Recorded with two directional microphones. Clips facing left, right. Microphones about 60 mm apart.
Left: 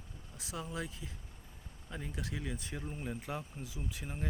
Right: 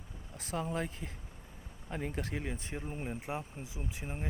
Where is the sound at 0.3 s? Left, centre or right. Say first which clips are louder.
Right 5 dB; right.